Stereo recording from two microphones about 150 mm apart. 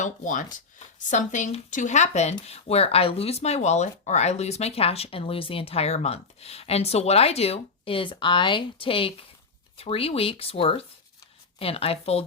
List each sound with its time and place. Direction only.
0.0 s speech: 60° left (ahead or behind); by 12.2 s 40° left (ahead or behind)